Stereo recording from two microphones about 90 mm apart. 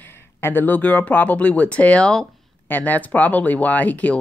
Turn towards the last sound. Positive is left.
turn(degrees=15)  # may be behind; listen again after turning